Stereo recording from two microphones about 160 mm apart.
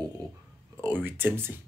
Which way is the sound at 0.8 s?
10° right (ahead or behind).